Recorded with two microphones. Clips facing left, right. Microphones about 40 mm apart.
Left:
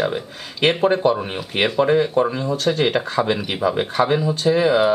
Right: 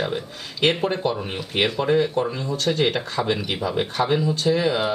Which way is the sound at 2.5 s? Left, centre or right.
Centre.